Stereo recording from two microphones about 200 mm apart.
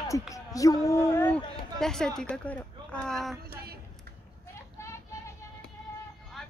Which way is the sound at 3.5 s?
50° right (ahead or behind).